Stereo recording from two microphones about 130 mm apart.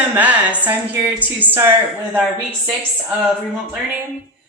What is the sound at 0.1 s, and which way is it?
Speech, 10° right (ahead or behind).